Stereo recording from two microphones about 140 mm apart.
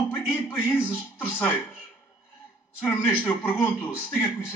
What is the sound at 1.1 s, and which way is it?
Speech, 15° left (ahead or behind).